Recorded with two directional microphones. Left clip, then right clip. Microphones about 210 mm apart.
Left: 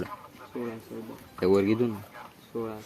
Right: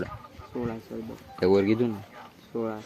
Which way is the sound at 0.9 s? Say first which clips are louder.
Right 3 dB; 40° right (ahead or behind).